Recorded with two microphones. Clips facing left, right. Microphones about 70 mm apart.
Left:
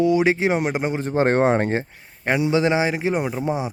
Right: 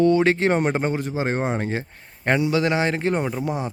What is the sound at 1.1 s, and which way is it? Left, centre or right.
Speech, left.